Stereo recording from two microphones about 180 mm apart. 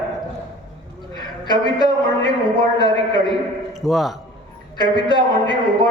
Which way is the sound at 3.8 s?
Centre (ahead or behind).